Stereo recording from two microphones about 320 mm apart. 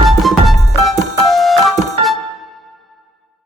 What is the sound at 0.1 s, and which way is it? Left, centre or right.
Music, centre.